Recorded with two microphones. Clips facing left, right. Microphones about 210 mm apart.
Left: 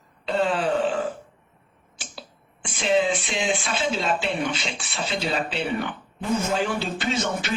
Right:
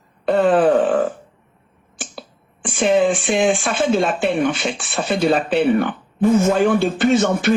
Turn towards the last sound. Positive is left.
turn(degrees=-55)  # may be behind; listen again after turning